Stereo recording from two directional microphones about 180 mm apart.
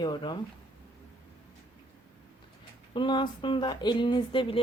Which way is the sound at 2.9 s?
25° left (ahead or behind).